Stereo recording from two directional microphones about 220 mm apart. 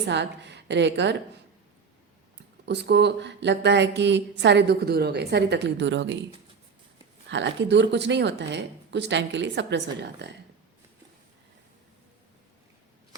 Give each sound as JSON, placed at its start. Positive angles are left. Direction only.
{"t": 0.0, "sound": "a woman's voice", "side_deg": -50}
{"t": 2.6, "sound": "a woman's voice", "side_deg": -50}
{"t": 7.3, "sound": "a woman's voice", "side_deg": -55}